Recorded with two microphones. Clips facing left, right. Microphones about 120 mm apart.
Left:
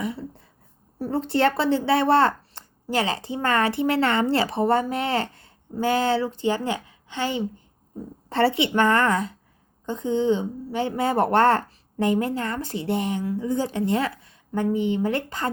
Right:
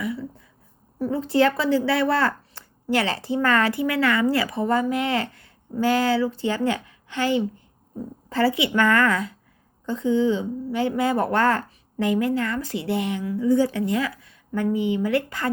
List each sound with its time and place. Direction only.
0.0 s a sound: 25° left (ahead or behind)
1.1 s a woman's voice: 65° left (ahead or behind)
1.5 s a woman's voice: 25° left (ahead or behind)